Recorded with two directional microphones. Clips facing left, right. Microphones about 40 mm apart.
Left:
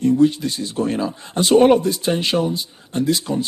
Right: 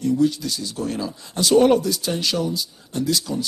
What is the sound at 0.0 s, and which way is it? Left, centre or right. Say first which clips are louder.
A man's voice: left 4 dB; left.